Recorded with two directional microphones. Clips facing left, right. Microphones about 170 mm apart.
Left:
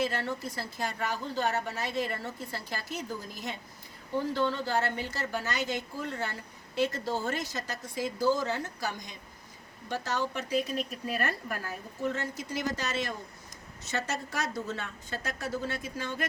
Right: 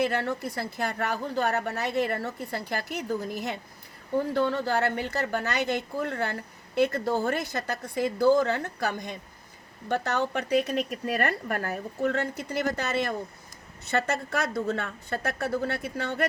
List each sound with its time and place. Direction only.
0.0 s a woman's voice: 60° right (ahead or behind)